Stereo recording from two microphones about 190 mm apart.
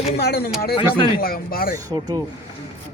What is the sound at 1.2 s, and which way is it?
Speech, 50° left (ahead or behind).